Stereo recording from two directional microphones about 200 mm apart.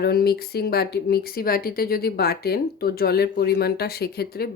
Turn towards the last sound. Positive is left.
turn(degrees=50)  # may be behind; listen again after turning